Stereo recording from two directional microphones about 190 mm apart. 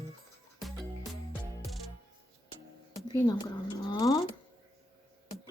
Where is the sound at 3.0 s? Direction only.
20° left (ahead or behind).